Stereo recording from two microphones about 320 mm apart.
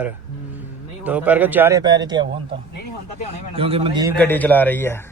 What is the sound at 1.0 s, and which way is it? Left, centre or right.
A man's voice, centre.